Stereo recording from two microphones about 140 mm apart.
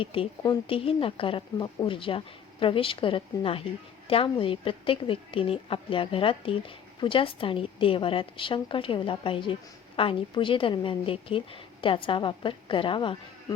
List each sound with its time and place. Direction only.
0.0 s a woman's voice: 40° left (ahead or behind)